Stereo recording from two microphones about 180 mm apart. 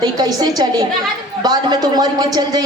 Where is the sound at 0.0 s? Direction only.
20° right (ahead or behind).